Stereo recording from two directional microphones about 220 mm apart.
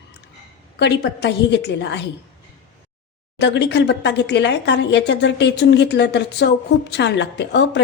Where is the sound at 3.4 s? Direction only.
50° left (ahead or behind).